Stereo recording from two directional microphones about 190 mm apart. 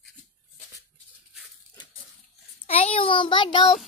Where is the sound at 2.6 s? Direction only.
30° left (ahead or behind).